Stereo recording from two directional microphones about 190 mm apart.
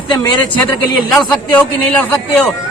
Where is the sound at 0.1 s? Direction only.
20° left (ahead or behind).